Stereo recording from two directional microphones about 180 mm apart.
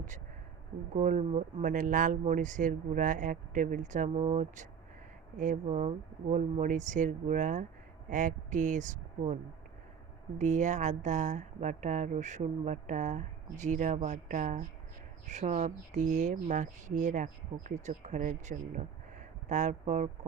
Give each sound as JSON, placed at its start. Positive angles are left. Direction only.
{"t": 0.9, "sound": "a woman's voice", "side_deg": -40}